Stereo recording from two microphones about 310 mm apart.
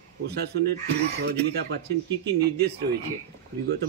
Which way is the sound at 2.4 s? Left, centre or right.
Right.